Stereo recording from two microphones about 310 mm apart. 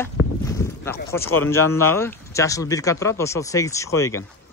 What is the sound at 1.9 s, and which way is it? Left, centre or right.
Speech, centre.